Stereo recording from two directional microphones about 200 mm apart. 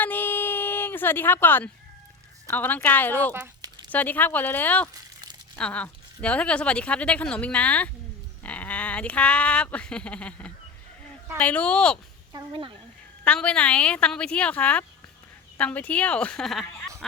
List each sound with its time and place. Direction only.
0.0 s a sound: 10° left (ahead or behind)
2.5 s speech: 10° left (ahead or behind)
3.3 s a sound: 15° right (ahead or behind)
3.8 s speech: 10° left (ahead or behind)
12.3 s a woman's voice: 25° right (ahead or behind)
13.2 s speech: 5° left (ahead or behind)